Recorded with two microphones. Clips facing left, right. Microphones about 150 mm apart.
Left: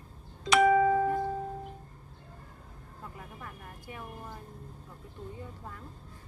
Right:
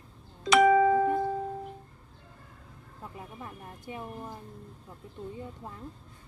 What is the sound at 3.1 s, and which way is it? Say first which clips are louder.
Speech: right 6 dB; 25° right (ahead or behind).